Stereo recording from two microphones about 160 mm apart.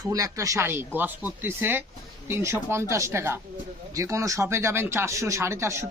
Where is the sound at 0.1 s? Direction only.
20° right (ahead or behind).